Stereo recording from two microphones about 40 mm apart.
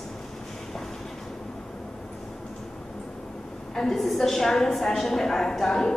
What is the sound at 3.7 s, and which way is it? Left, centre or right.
A woman's voice, centre.